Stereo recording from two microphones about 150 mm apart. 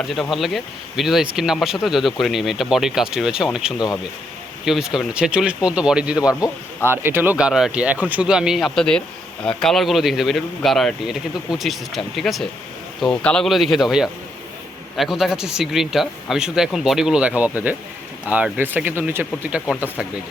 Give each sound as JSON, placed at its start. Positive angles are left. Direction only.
{"t": 0.1, "sound": "speech", "side_deg": 0}
{"t": 6.1, "sound": "speech", "side_deg": 25}
{"t": 6.8, "sound": "speech", "side_deg": -15}